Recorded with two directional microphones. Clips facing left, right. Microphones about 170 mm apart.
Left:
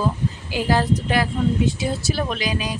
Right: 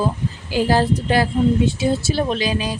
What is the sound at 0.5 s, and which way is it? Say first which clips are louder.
A woman's voice: right 3 dB; 30° right (ahead or behind).